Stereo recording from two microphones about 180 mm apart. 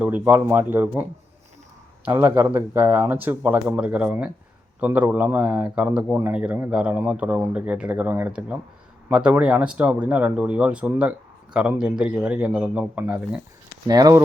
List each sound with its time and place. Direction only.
0.0 s speech: 10° right (ahead or behind)
2.0 s speech: 10° right (ahead or behind)
13.8 s speech: 20° right (ahead or behind)